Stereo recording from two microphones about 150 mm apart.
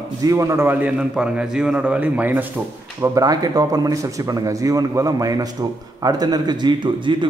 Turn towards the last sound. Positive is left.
turn(degrees=-30)  # may be behind; listen again after turning